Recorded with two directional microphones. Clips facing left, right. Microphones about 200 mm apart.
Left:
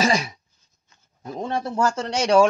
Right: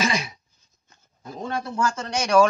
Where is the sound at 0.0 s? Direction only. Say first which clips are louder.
Left 4 dB; 40° left (ahead or behind).